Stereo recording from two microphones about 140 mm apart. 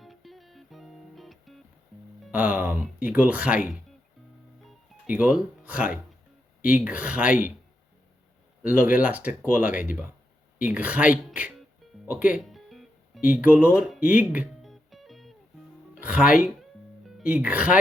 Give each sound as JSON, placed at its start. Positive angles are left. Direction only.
{"t": 0.0, "sound": "music", "side_deg": 0}
{"t": 2.3, "sound": "speech", "side_deg": -10}
{"t": 5.0, "sound": "speech", "side_deg": -10}
{"t": 6.6, "sound": "speech", "side_deg": 75}
{"t": 6.8, "sound": "speech", "side_deg": -10}
{"t": 8.6, "sound": "speech", "side_deg": -10}
{"t": 12.5, "sound": "music", "side_deg": 0}
{"t": 13.2, "sound": "speech", "side_deg": -10}
{"t": 14.6, "sound": "music", "side_deg": 0}
{"t": 17.2, "sound": "speech", "side_deg": -10}